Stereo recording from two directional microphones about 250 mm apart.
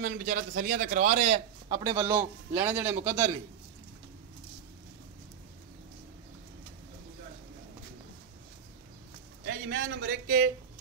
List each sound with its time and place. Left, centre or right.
0.0 s a man's voice: right; by 3.3 s centre
9.4 s a man's voice: right